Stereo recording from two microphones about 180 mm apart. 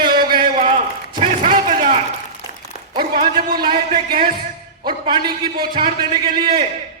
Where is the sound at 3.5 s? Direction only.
25° right (ahead or behind).